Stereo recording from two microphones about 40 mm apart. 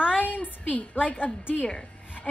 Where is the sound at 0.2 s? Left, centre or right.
Left.